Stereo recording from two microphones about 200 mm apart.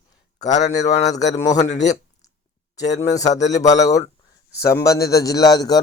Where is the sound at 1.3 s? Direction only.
60° left (ahead or behind).